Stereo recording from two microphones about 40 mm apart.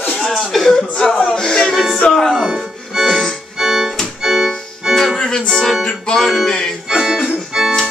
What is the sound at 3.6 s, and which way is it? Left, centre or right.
Music, centre.